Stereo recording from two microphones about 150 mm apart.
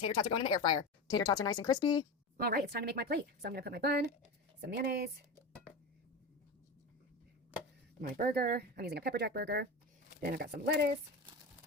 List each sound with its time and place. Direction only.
0.0 s speech: 30° left (ahead or behind)
2.4 s speech: 90° right
8.0 s speech: 75° right (ahead or behind)